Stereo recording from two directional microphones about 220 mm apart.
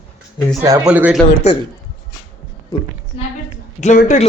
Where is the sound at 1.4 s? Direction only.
30° left (ahead or behind).